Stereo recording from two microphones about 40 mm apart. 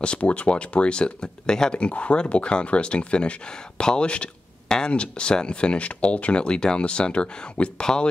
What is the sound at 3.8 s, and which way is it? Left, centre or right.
Speech, centre.